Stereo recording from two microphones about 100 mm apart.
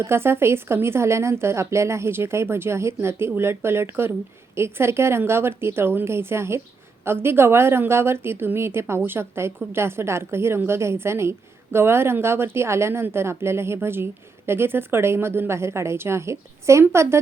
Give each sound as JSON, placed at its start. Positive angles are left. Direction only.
{"t": 0.0, "sound": "a woman's voice", "side_deg": -25}